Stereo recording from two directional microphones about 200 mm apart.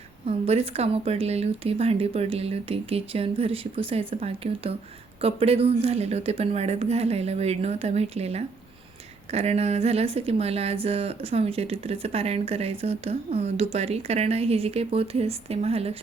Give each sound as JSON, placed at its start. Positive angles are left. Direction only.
{"t": 0.3, "sound": "a woman's voice", "side_deg": -30}